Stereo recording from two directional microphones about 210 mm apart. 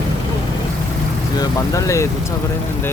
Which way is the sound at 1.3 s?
15° left (ahead or behind).